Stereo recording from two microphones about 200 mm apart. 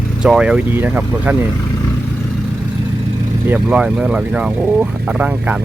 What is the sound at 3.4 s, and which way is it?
Speech, 5° right (ahead or behind).